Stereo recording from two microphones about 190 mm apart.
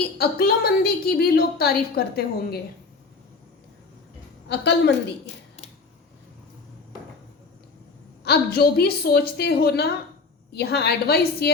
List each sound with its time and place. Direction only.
0.2 s a woman's voice: 55° left (ahead or behind)
4.4 s a woman's voice: 65° left (ahead or behind)
8.2 s a woman's voice: 60° left (ahead or behind)